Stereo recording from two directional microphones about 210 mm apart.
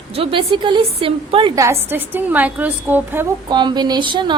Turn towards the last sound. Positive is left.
turn(degrees=-20)  # may be behind; listen again after turning